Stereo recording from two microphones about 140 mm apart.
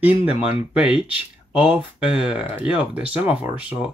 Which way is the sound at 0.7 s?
10° right (ahead or behind).